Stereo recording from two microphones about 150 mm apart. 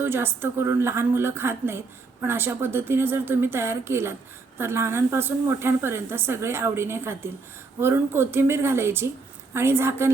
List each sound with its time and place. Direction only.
0.0 s a woman's voice: 15° right (ahead or behind)